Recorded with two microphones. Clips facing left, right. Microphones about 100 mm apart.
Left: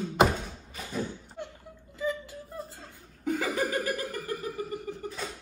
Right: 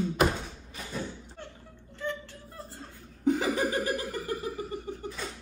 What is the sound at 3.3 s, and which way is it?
Laughter, 25° right (ahead or behind).